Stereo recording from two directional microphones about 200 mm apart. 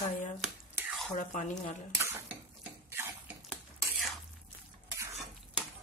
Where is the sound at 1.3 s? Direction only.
35° left (ahead or behind).